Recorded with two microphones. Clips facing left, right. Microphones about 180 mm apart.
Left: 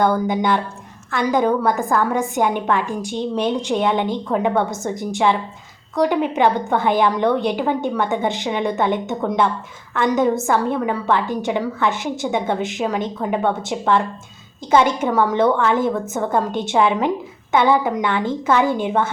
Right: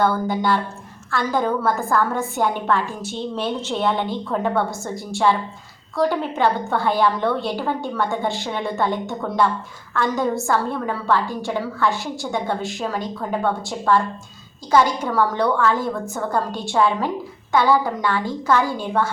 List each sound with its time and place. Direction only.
0.0 s a woman's voice: 20° left (ahead or behind)